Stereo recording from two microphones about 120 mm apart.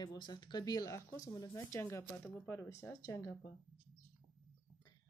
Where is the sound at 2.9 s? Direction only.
30° left (ahead or behind).